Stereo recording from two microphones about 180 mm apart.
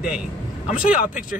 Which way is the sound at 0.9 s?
50° left (ahead or behind).